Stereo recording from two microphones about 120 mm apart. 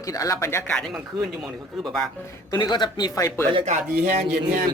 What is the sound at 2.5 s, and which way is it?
Speech, 35° left (ahead or behind).